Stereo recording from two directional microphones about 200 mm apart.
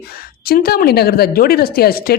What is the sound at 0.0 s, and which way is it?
A woman's voice, 50° left (ahead or behind).